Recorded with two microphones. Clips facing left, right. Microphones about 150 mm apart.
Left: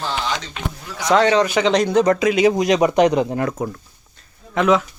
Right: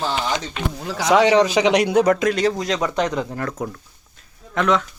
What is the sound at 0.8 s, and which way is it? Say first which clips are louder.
Speech: right 5 dB; 90° right.